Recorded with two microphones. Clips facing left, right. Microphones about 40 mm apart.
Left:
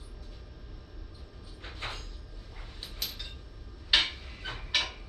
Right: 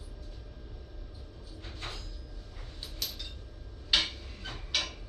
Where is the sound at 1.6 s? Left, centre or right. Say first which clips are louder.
Left 3 dB; left.